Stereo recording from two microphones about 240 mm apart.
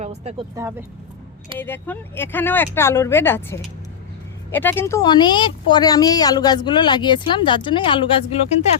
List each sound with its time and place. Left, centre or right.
0.0 s speech: right
0.5 s speech: centre
1.5 s a woman's voice: centre